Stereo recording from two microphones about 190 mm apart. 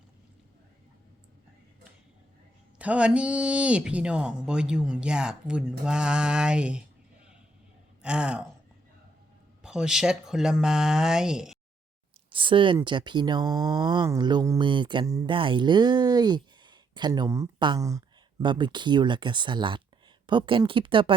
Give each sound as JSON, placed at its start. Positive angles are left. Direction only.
{"t": 2.7, "sound": "speech", "side_deg": -5}
{"t": 8.0, "sound": "speech", "side_deg": -5}
{"t": 9.6, "sound": "speech", "side_deg": -5}
{"t": 12.3, "sound": "speech", "side_deg": -25}